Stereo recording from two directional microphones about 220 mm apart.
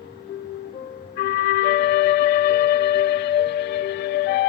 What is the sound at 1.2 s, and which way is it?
Music, 45° left (ahead or behind).